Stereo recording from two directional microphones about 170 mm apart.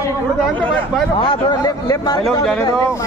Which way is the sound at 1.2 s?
25° left (ahead or behind).